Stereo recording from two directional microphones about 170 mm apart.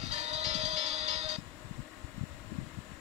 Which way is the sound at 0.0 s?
40° right (ahead or behind).